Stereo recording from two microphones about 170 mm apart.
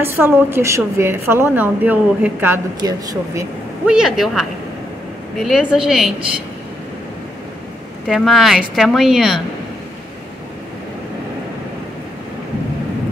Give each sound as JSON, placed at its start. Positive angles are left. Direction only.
{"t": 0.0, "sound": "a woman's voice", "side_deg": -15}
{"t": 2.8, "sound": "speech", "side_deg": -20}
{"t": 3.8, "sound": "speech", "side_deg": -5}
{"t": 5.7, "sound": "speech", "side_deg": -5}
{"t": 8.1, "sound": "speech", "side_deg": 0}